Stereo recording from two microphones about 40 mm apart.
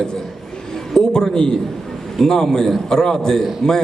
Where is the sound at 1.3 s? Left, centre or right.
Centre.